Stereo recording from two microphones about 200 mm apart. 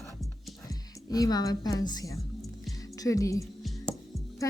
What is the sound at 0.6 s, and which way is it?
A woman's voice, 20° left (ahead or behind).